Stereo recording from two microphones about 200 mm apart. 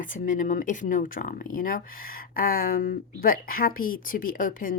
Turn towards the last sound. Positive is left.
turn(degrees=45)  # may be behind; listen again after turning